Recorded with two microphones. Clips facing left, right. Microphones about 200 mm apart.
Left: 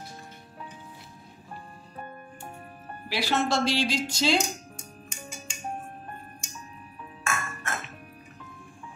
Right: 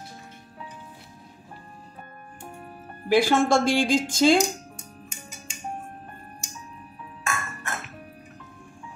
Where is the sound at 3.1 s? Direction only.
50° right (ahead or behind).